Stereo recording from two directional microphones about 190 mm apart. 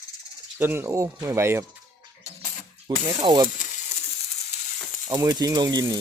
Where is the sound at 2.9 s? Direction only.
20° right (ahead or behind).